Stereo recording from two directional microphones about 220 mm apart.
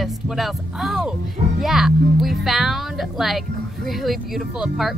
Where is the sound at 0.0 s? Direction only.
Centre (ahead or behind).